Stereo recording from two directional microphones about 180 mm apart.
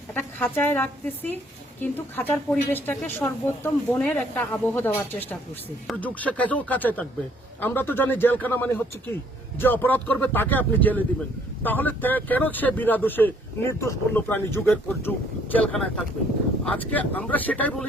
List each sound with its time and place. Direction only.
0.1 s speech: 10° left (ahead or behind)